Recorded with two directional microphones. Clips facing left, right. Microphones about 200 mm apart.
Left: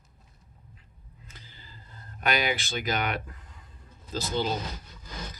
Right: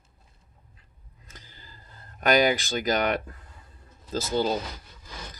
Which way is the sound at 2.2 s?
45° right (ahead or behind).